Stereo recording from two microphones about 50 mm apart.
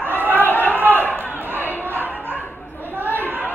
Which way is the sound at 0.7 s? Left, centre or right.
Right.